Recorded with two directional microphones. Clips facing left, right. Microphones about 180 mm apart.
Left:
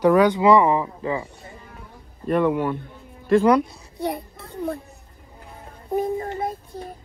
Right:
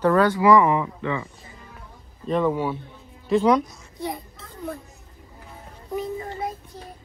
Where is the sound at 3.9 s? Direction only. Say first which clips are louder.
Left 4 dB; 60° left (ahead or behind).